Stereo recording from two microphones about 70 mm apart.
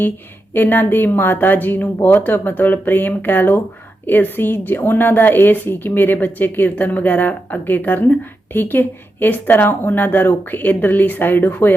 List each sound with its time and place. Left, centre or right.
0.5 s speech: left